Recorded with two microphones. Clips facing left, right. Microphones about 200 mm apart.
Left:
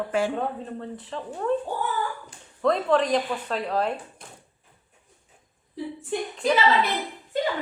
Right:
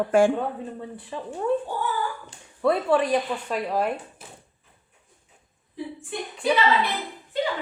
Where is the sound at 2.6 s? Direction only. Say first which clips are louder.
Even; 10° right (ahead or behind).